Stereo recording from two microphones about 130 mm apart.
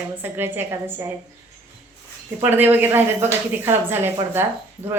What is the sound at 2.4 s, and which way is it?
A woman's voice, 15° right (ahead or behind).